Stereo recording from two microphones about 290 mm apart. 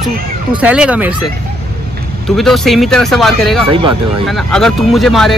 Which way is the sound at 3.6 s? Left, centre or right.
Centre.